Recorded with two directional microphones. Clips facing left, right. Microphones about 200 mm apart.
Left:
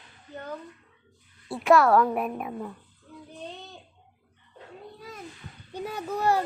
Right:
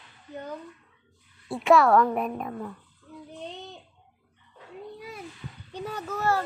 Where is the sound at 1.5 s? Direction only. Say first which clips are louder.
Even; centre (ahead or behind).